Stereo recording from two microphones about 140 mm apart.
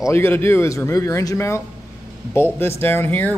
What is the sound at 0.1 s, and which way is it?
Speech, 15° left (ahead or behind).